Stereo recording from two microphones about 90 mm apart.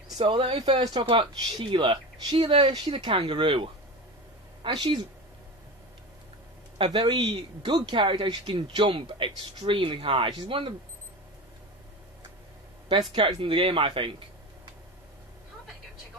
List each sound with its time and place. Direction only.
0.2 s speech: 70° right (ahead or behind)
6.8 s speech: 65° right (ahead or behind)
12.8 s speech: 65° right (ahead or behind)